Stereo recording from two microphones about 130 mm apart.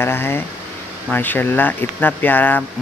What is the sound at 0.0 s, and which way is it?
Speech, 15° left (ahead or behind).